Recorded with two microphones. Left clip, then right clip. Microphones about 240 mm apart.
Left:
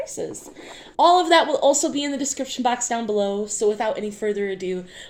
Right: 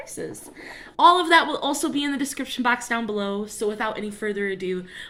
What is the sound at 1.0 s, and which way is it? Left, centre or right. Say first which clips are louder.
A woman's voice: left 1 dB; centre.